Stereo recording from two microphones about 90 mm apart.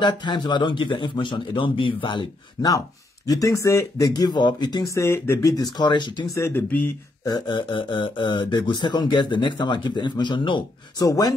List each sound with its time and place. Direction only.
0.0 s speech: 55° left (ahead or behind)
2.6 s speech: 45° left (ahead or behind)
4.1 s speech: 55° left (ahead or behind)
4.8 s speech: 35° left (ahead or behind)
5.4 s speech: 45° left (ahead or behind)
6.3 s speech: 30° left (ahead or behind)
7.2 s speech: 55° left (ahead or behind)
11.0 s speech: 45° left (ahead or behind)